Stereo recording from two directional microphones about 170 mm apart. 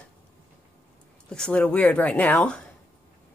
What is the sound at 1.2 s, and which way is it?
Speech, 5° left (ahead or behind).